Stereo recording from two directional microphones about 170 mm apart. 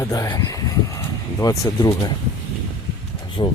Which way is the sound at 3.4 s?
30° left (ahead or behind).